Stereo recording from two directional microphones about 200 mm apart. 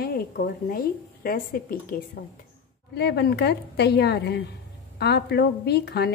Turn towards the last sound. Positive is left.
turn(degrees=55)  # may be behind; listen again after turning